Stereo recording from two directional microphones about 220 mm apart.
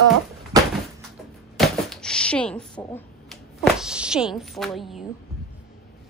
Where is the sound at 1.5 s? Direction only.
5° left (ahead or behind).